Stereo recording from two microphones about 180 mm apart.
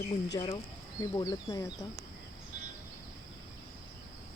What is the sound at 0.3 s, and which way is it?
Speech, 30° left (ahead or behind).